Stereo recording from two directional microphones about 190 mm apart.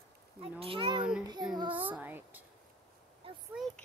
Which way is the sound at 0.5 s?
30° right (ahead or behind).